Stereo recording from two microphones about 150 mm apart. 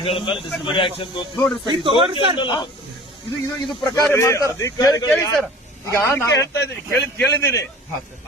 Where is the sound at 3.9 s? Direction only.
20° left (ahead or behind).